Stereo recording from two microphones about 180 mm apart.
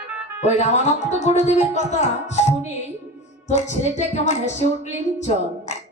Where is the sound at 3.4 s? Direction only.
40° left (ahead or behind).